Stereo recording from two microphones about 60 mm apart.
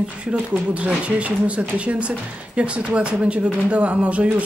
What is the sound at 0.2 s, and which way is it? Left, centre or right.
Speech, centre.